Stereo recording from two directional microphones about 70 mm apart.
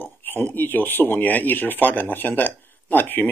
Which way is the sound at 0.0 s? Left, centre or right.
Left.